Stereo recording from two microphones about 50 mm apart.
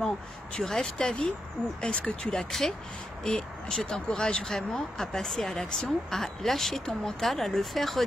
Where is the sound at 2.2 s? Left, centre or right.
Centre.